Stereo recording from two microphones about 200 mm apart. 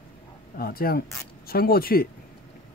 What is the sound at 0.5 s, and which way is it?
Speech, 50° left (ahead or behind).